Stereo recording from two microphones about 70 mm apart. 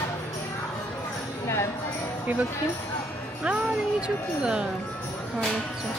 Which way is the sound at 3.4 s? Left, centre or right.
Centre.